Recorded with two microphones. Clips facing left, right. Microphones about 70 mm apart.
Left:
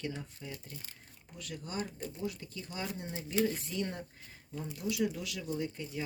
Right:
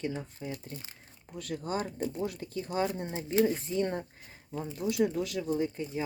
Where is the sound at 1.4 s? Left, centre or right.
Right.